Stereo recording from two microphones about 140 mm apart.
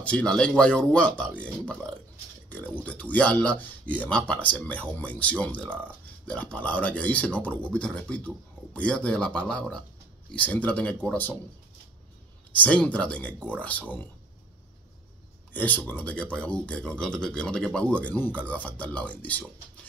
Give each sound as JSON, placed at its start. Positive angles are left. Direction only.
{"t": 0.0, "sound": "speech", "side_deg": 10}
{"t": 12.5, "sound": "speech", "side_deg": 10}
{"t": 15.5, "sound": "speech", "side_deg": 10}